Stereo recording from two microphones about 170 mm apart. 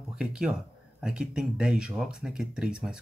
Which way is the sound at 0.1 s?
5° right (ahead or behind).